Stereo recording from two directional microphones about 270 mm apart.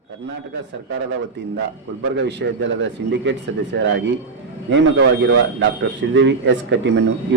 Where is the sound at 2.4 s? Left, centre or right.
Right.